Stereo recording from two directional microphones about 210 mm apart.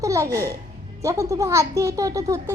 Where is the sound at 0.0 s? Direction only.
15° right (ahead or behind).